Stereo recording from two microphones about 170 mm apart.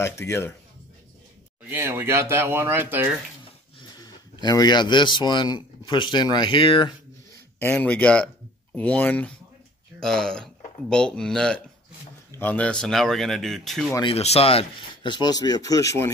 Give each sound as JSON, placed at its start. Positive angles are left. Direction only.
{"t": 0.0, "sound": "speech", "side_deg": 15}
{"t": 1.7, "sound": "speech", "side_deg": -10}
{"t": 4.0, "sound": "speech", "side_deg": 25}
{"t": 7.6, "sound": "speech", "side_deg": 10}
{"t": 14.0, "sound": "speech", "side_deg": 35}